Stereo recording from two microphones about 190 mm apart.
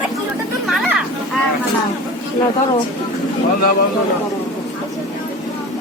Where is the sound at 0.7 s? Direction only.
Centre (ahead or behind).